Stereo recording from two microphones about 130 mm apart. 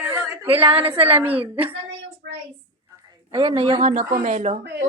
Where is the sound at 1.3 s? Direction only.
45° right (ahead or behind).